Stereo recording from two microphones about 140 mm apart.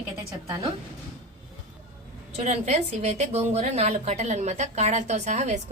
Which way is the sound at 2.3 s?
50° right (ahead or behind).